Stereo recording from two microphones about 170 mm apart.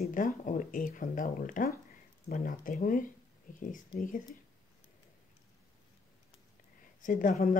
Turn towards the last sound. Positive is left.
turn(degrees=50)  # may be behind; listen again after turning